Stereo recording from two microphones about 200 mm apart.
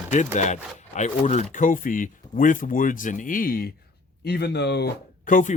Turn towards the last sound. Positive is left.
turn(degrees=40)  # may be behind; listen again after turning